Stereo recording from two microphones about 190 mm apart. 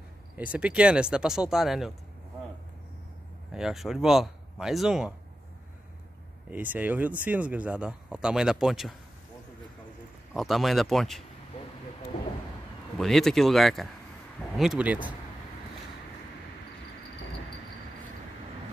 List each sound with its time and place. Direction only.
0.4 s speech: 5° right (ahead or behind)
3.5 s speech: centre (ahead or behind)
6.5 s speech: 10° right (ahead or behind)
10.3 s speech: centre (ahead or behind)
12.9 s speech: centre (ahead or behind)